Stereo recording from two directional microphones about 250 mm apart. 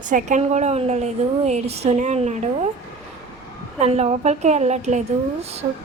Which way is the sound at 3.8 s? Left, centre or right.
Right.